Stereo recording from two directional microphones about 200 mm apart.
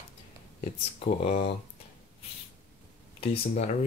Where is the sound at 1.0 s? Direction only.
35° left (ahead or behind).